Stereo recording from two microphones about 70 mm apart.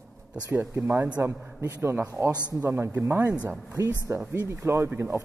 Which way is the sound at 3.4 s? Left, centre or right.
Right.